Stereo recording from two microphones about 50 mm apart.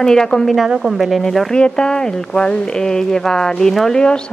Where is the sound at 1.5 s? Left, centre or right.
Centre.